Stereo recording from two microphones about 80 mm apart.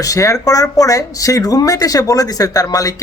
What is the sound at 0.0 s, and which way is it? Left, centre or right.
Speech, left.